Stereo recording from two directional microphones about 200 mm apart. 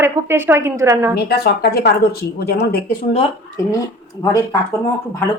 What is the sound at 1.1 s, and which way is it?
Speech, 55° left (ahead or behind).